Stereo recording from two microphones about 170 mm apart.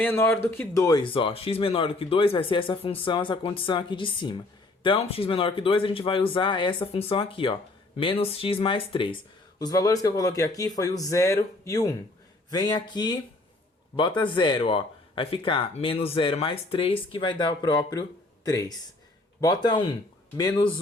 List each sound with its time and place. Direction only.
0.0 s speech: 10° left (ahead or behind)